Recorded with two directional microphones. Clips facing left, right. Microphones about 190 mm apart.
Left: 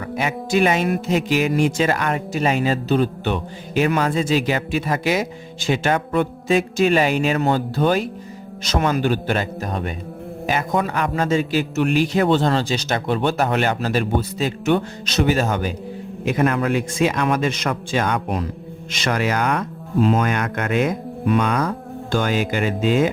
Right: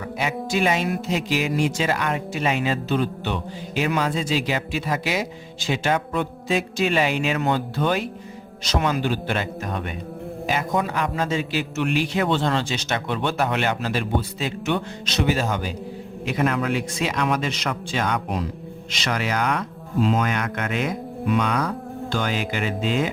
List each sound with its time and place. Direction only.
0.2 s speech: 55° left (ahead or behind); by 9.9 s 35° left (ahead or behind)
10.4 s speech: 50° left (ahead or behind)